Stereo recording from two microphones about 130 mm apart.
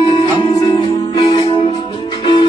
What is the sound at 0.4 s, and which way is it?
Music, 40° left (ahead or behind).